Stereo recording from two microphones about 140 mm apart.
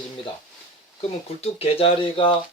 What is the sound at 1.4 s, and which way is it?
Speech, 45° left (ahead or behind).